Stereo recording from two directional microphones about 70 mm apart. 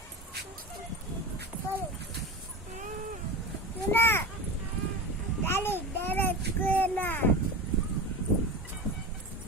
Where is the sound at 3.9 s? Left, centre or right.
Left.